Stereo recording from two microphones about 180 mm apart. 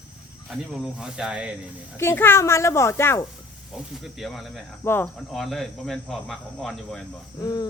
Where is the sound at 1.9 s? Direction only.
15° left (ahead or behind).